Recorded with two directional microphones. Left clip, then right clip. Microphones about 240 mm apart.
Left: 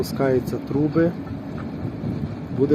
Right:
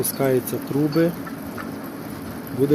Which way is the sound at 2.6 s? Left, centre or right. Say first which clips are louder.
Even; centre.